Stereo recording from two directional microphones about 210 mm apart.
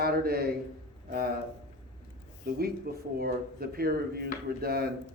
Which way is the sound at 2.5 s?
45° right (ahead or behind).